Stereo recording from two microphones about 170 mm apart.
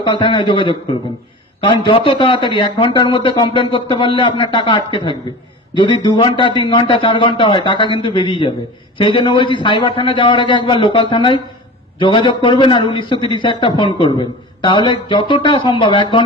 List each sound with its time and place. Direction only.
0.0 s a man's voice: 30° left (ahead or behind)